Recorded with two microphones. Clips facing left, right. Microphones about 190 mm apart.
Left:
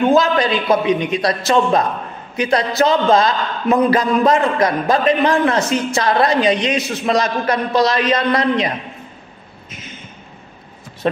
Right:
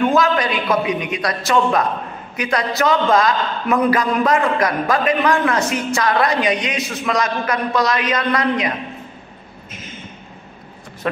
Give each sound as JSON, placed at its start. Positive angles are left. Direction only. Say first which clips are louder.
{"t": 0.0, "sound": "a man's voice", "louder": "left 2 dB", "side_deg": 30}